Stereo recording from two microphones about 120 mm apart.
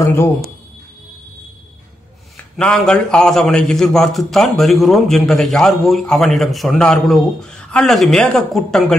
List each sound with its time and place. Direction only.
0.0 s speech: 25° left (ahead or behind)
2.6 s a man's voice: 5° left (ahead or behind)